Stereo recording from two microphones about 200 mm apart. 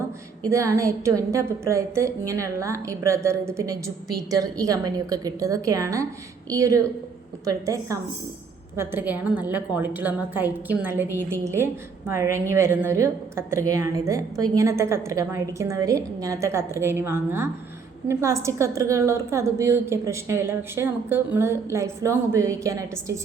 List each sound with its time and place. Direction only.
0.4 s a woman's voice: 15° right (ahead or behind)